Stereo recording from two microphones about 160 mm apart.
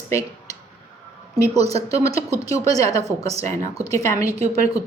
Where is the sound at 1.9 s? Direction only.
20° left (ahead or behind).